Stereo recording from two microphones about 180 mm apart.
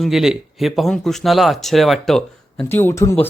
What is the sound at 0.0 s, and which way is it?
A man's voice, centre (ahead or behind).